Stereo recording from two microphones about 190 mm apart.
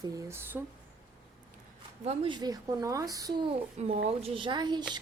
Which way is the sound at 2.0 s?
35° right (ahead or behind).